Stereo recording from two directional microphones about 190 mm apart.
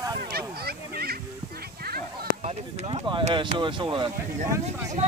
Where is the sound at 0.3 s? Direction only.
55° right (ahead or behind).